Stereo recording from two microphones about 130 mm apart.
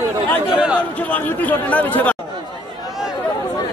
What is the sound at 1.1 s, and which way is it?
Speech, 15° left (ahead or behind).